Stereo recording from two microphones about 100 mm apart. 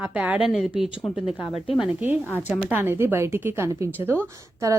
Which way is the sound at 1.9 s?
20° right (ahead or behind).